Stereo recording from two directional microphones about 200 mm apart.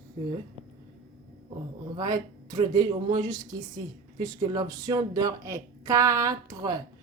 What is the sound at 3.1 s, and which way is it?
Speech, 20° right (ahead or behind).